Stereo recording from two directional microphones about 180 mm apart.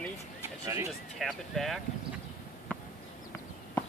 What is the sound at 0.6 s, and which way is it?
Speech, 15° right (ahead or behind).